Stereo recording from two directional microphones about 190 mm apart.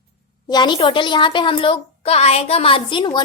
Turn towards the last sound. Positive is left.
turn(degrees=25)  # may be behind; listen again after turning